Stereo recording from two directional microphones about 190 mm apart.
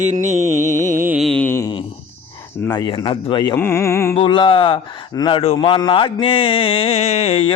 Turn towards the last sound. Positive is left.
turn(degrees=30)  # may be behind; listen again after turning